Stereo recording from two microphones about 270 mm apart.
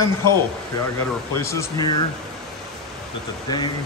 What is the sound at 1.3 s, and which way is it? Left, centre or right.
Speech, centre.